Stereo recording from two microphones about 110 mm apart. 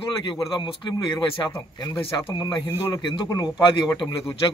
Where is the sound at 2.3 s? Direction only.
40° left (ahead or behind).